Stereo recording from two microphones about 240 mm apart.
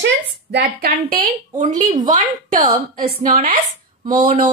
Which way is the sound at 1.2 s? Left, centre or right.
Right.